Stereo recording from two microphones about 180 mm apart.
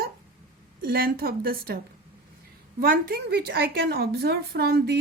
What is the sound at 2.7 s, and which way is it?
A woman's voice, 55° right (ahead or behind).